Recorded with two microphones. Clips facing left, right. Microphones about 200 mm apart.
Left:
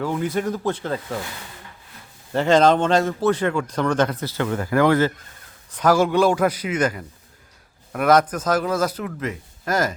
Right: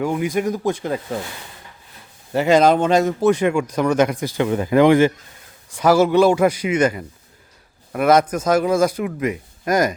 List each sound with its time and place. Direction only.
0.0 s a man's voice: 15° right (ahead or behind)
2.3 s a man's voice: 10° right (ahead or behind)